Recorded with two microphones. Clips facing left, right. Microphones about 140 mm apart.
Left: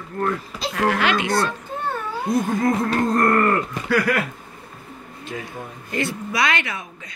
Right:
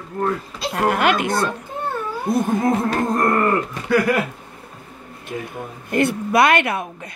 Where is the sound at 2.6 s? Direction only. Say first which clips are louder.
Right 1 dB; 20° right (ahead or behind).